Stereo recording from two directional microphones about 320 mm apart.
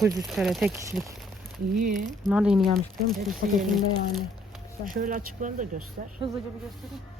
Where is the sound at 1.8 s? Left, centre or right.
Right.